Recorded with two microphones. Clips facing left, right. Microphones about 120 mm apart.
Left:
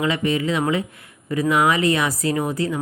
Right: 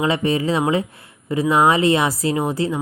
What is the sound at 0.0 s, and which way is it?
Speech, 30° right (ahead or behind).